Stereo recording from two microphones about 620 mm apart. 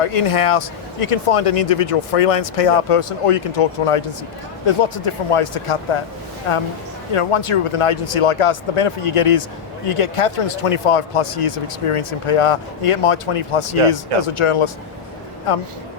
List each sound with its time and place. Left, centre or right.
0.0 s speech: left